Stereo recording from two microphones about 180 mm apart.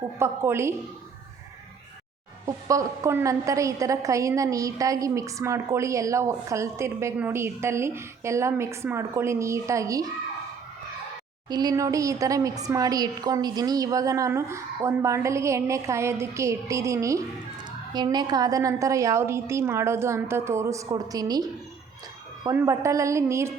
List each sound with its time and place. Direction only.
0.2 s a woman's voice: 15° right (ahead or behind)
2.5 s a woman's voice: 20° right (ahead or behind)
11.4 s a woman's voice: 20° right (ahead or behind)
22.4 s a woman's voice: 15° right (ahead or behind)